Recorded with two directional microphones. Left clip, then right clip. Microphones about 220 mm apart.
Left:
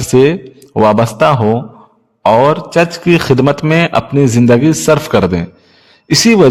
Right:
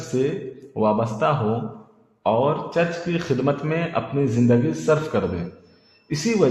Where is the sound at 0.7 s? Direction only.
55° left (ahead or behind).